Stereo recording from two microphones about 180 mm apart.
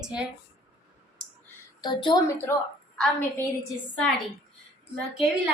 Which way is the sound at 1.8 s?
25° left (ahead or behind).